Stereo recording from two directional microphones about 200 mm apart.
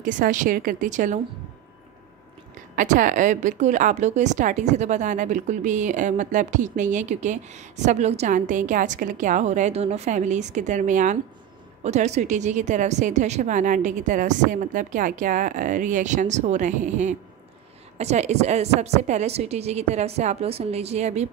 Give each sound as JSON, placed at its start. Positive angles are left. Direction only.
{"t": 0.0, "sound": "a woman's voice", "side_deg": -40}
{"t": 2.7, "sound": "a woman's voice", "side_deg": -40}